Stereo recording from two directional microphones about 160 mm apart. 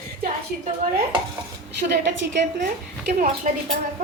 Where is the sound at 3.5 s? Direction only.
55° right (ahead or behind).